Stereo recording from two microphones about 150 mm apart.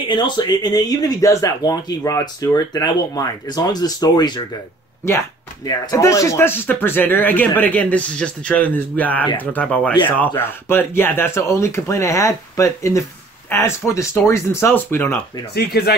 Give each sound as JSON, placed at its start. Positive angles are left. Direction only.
{"t": 0.1, "sound": "speech", "side_deg": 30}
{"t": 5.7, "sound": "speech", "side_deg": 25}
{"t": 15.5, "sound": "speech", "side_deg": 90}